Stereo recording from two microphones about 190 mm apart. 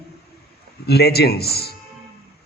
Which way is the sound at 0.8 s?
55° left (ahead or behind).